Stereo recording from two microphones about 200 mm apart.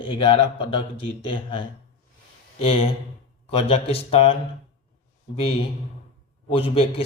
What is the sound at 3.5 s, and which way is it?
Speech, 30° left (ahead or behind).